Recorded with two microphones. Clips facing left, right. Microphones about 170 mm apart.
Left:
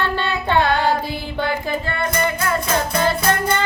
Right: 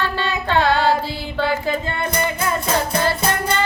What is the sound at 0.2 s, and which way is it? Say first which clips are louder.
Music: right 1 dB; 15° left (ahead or behind).